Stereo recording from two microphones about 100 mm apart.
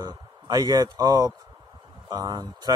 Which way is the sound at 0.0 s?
40° right (ahead or behind).